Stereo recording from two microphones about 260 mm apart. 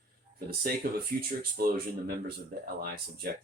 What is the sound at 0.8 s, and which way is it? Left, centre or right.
Speech, right.